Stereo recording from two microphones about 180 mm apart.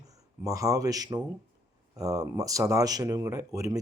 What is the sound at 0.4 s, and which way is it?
A man's voice, 15° right (ahead or behind).